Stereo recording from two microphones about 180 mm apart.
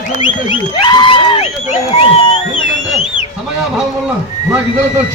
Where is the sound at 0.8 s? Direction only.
25° left (ahead or behind).